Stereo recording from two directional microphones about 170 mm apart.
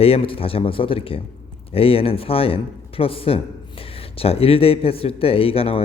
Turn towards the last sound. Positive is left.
turn(degrees=35)  # may be behind; listen again after turning